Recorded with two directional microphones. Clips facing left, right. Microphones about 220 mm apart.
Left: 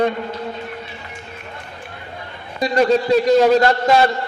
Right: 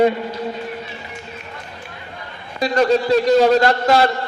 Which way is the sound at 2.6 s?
Centre (ahead or behind).